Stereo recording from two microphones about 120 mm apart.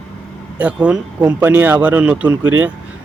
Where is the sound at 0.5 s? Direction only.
10° right (ahead or behind).